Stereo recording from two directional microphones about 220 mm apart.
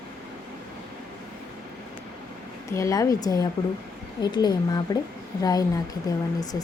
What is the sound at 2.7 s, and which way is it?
Speech, 15° left (ahead or behind).